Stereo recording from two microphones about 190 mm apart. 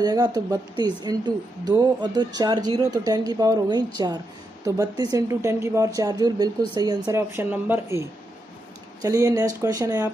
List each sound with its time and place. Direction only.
0.0 s a woman's voice: 20° right (ahead or behind)
9.0 s a woman's voice: 15° right (ahead or behind)